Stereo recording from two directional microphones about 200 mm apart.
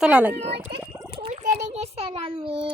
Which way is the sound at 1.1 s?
30° right (ahead or behind).